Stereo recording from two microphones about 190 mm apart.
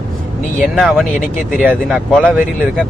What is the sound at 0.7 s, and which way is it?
Speech, centre (ahead or behind).